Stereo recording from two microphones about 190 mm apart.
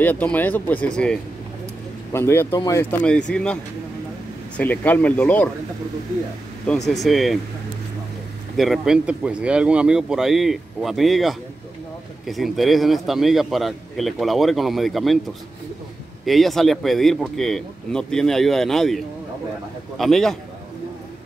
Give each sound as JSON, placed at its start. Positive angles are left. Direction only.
{"t": 0.0, "sound": "speech", "side_deg": 10}
{"t": 4.6, "sound": "speech", "side_deg": 10}
{"t": 6.9, "sound": "a man's voice", "side_deg": 0}
{"t": 8.5, "sound": "a man's voice", "side_deg": 0}
{"t": 16.3, "sound": "a man's voice", "side_deg": 0}
{"t": 20.0, "sound": "a man's voice", "side_deg": 0}